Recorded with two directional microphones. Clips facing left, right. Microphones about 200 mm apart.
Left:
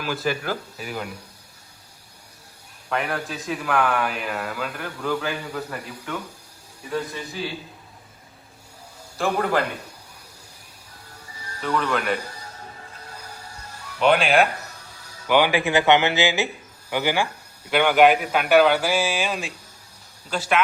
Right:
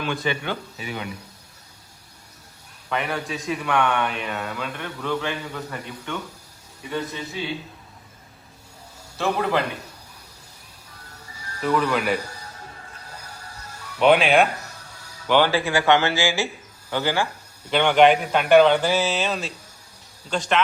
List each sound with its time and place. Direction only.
0.0 s a man's voice: 5° left (ahead or behind)
2.9 s a man's voice: centre (ahead or behind)
9.1 s a man's voice: centre (ahead or behind)
11.6 s a man's voice: centre (ahead or behind)
14.0 s a man's voice: centre (ahead or behind)
15.3 s a man's voice: 15° left (ahead or behind)